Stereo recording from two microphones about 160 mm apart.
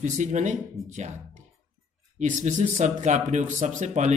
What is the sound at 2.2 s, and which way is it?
Speech, 50° right (ahead or behind).